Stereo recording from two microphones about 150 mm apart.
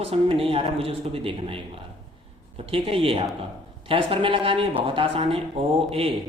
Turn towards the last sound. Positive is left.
turn(degrees=-40)  # may be behind; listen again after turning